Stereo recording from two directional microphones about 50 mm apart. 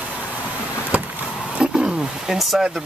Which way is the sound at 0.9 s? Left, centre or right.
Right.